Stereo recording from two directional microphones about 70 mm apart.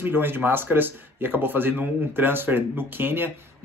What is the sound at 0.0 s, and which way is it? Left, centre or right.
A man's voice, right.